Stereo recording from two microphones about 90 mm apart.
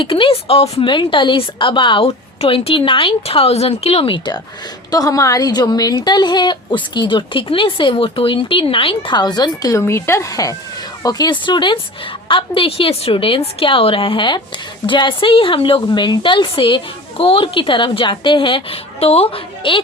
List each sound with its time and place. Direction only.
0.0 s a woman's voice: 70° left (ahead or behind); by 4.2 s 90° left
4.9 s a woman's voice: 45° left (ahead or behind); by 9.1 s 80° left
9.1 s speech: 50° left (ahead or behind)
9.8 s a woman's voice: 30° left (ahead or behind); by 11.8 s 60° left (ahead or behind)
12.3 s a woman's voice: 80° left
15.9 s a woman's voice: 60° left (ahead or behind); by 19.8 s 80° left